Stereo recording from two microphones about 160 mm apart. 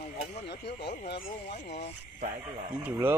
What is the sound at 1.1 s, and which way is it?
Speech, 90° left.